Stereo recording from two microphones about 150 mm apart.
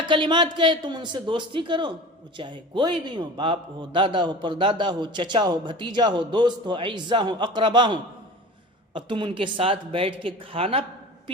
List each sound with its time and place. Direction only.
0.1 s a man's voice: 30° right (ahead or behind)